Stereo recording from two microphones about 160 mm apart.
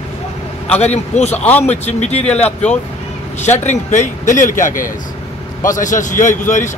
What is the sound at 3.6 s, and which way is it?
A man's voice, 50° left (ahead or behind).